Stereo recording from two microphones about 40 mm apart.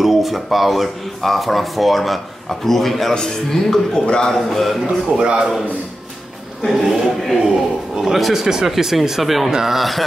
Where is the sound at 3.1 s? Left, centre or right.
Centre.